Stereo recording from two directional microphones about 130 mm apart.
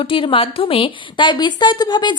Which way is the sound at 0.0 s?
40° left (ahead or behind).